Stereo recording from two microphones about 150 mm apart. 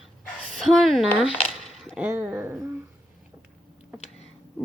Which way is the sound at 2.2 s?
15° right (ahead or behind).